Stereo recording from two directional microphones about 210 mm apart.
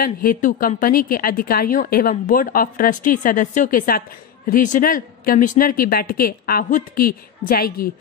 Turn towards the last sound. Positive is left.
turn(degrees=45)  # may be behind; listen again after turning